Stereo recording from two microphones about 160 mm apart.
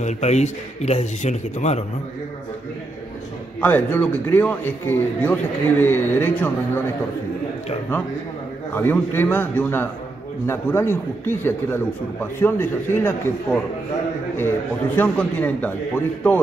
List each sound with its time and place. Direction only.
0.0 s a man's voice: 45° left (ahead or behind)
3.6 s a man's voice: 10° left (ahead or behind)
8.7 s a man's voice: 15° left (ahead or behind)
15.0 s a man's voice: 10° left (ahead or behind)